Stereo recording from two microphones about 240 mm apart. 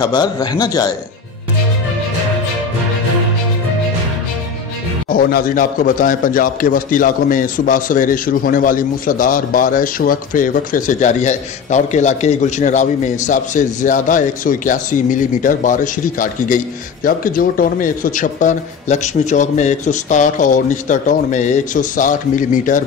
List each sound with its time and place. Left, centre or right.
0.0 s a man's voice: centre
5.1 s a man's voice: left